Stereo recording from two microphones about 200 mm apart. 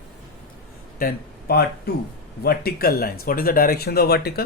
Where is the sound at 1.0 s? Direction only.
50° left (ahead or behind).